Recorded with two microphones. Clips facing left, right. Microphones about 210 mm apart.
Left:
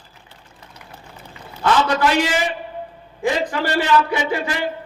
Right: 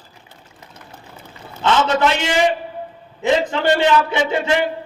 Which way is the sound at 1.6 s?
25° right (ahead or behind).